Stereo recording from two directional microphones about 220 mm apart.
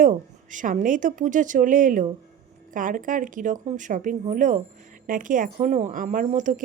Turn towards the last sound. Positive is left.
turn(degrees=-35)  # may be behind; listen again after turning